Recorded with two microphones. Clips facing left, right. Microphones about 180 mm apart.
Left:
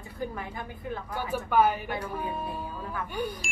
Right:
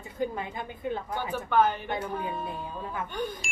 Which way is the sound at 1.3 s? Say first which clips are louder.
Left 1 dB; 10° left (ahead or behind).